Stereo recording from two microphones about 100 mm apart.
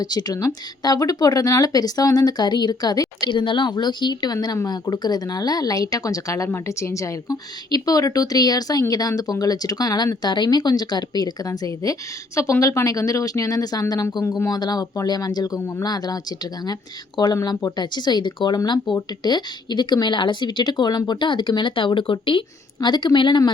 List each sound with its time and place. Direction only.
0.0 s speech: 40° left (ahead or behind)
3.2 s a woman's voice: 55° left (ahead or behind)
14.3 s speech: 30° left (ahead or behind)
14.5 s a woman's voice: 40° left (ahead or behind)